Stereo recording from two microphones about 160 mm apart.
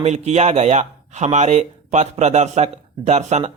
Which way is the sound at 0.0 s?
45° right (ahead or behind).